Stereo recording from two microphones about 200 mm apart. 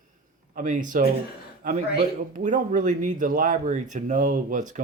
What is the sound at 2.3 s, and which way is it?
Speech, 40° right (ahead or behind).